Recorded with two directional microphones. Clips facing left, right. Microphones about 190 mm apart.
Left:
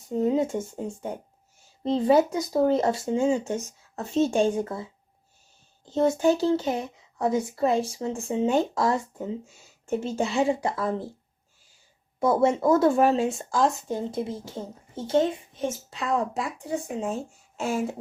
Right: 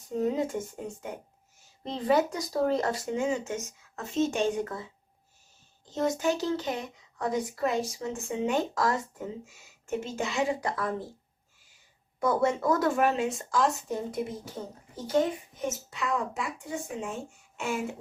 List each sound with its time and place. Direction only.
0.1 s speech: 25° left (ahead or behind)
12.2 s a woman's voice: 25° left (ahead or behind)